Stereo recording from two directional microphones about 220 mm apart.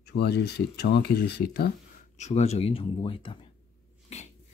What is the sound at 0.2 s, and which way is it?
Speech, 50° left (ahead or behind).